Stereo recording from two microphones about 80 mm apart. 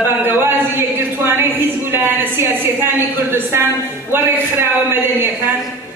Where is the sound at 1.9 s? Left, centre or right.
Right.